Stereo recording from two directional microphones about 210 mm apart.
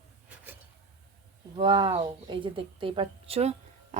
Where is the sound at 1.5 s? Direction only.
20° right (ahead or behind).